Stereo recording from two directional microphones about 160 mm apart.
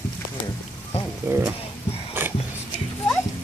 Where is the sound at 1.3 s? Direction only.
10° right (ahead or behind).